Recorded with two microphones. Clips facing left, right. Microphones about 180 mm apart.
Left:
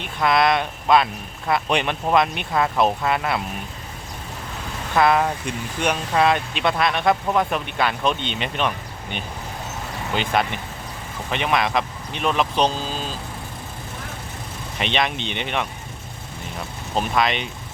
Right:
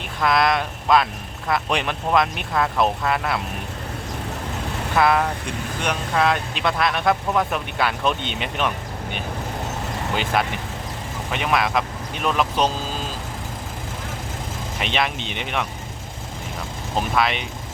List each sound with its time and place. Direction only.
0.2 s speech: centre (ahead or behind)
4.9 s speech: centre (ahead or behind)
10.3 s speech: 5° right (ahead or behind)
14.8 s speech: 5° right (ahead or behind)
17.2 s speech: 5° right (ahead or behind)